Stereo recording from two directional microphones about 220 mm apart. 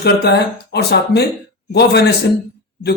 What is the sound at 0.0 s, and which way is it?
Speech, 45° left (ahead or behind).